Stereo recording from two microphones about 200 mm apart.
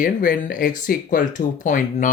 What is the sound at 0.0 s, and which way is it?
Speech, 45° left (ahead or behind).